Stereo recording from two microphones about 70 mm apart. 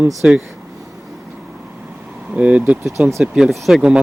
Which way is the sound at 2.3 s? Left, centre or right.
Centre.